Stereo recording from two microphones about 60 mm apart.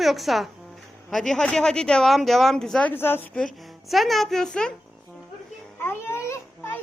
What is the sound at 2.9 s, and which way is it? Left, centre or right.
Speech, left.